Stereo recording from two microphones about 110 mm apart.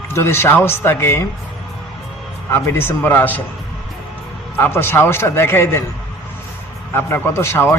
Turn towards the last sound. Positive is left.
turn(degrees=20)  # may be behind; listen again after turning